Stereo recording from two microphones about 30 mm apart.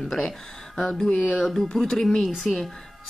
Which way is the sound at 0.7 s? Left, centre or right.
Centre.